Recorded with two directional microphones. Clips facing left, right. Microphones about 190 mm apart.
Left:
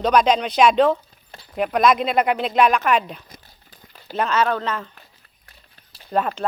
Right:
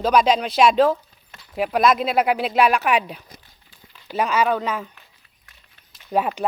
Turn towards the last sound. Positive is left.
turn(degrees=-10)  # may be behind; listen again after turning